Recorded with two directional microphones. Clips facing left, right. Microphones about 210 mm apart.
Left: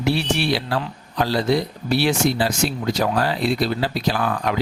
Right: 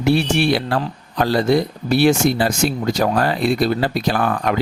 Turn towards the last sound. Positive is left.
turn(degrees=-50)  # may be behind; listen again after turning